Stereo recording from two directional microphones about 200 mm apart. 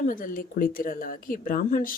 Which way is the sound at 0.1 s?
45° left (ahead or behind).